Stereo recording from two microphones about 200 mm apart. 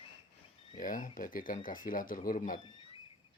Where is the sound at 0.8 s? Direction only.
45° left (ahead or behind).